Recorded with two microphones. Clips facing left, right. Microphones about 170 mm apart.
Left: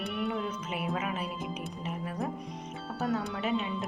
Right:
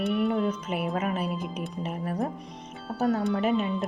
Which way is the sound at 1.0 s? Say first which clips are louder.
Right 5 dB; 45° right (ahead or behind).